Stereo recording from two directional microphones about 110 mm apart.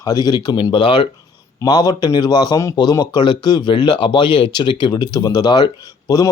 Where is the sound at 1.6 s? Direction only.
40° left (ahead or behind).